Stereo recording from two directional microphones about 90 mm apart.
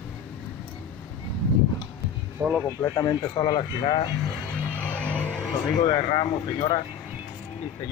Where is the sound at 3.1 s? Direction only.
65° left (ahead or behind).